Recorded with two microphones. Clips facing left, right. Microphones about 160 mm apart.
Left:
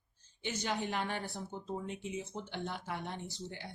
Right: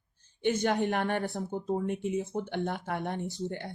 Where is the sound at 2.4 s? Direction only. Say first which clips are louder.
Right 8 dB; 55° right (ahead or behind).